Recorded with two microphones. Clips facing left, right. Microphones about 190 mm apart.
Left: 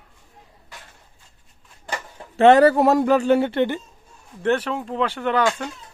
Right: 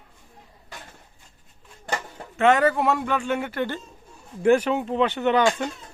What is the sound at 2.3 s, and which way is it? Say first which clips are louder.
Speech: left 6 dB; 35° left (ahead or behind).